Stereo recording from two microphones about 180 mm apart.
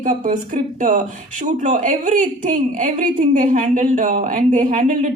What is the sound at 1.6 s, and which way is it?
Speech, 45° right (ahead or behind).